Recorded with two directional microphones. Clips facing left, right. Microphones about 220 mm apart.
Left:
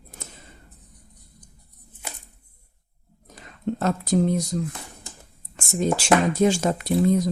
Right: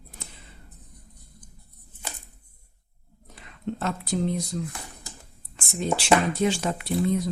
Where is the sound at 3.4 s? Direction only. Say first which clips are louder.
Left 4 dB; 40° left (ahead or behind).